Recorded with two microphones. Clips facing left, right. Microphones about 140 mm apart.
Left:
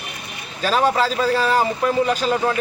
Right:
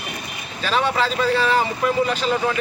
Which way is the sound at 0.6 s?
40° left (ahead or behind).